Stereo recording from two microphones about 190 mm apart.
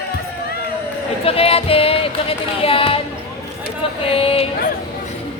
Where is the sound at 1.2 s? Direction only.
30° left (ahead or behind).